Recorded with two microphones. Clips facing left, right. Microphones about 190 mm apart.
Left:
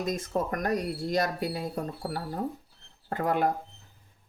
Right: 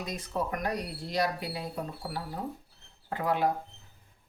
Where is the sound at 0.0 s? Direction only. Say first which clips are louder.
Left 4 dB; 45° left (ahead or behind).